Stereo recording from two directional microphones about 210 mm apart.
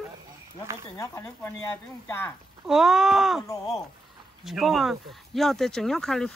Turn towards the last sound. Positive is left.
turn(degrees=0)  # may be behind; listen again after turning